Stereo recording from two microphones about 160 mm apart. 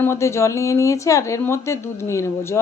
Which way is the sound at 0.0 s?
15° left (ahead or behind).